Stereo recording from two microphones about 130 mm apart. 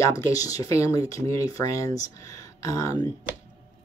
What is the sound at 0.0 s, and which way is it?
Speech, 25° left (ahead or behind).